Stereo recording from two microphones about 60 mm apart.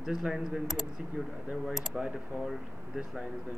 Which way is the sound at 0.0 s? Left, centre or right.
Centre.